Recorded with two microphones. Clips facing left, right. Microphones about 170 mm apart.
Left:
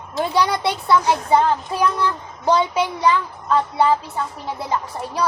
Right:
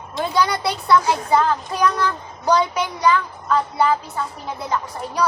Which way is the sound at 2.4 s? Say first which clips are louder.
Left 1 dB; 25° left (ahead or behind).